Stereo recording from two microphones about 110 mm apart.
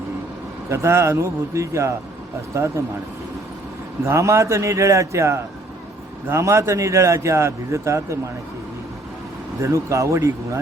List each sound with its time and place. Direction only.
0.7 s a man's voice: 25° right (ahead or behind)
4.0 s a man's voice: 25° right (ahead or behind)
9.6 s a man's voice: 30° right (ahead or behind)